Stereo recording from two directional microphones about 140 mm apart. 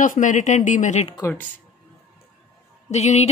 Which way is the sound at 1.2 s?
20° left (ahead or behind).